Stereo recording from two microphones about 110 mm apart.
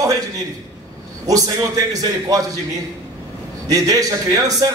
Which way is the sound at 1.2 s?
35° right (ahead or behind).